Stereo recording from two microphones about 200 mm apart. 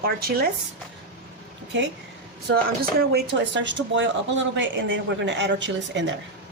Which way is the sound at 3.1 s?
65° right (ahead or behind).